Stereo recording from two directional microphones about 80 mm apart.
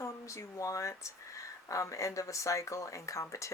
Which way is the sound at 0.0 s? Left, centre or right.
Left.